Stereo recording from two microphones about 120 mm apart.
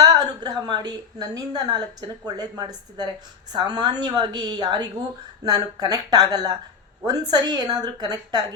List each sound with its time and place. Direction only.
0.0 s a woman's voice: 35° right (ahead or behind)